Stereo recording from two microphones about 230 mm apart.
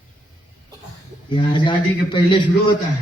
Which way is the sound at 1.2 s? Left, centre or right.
Left.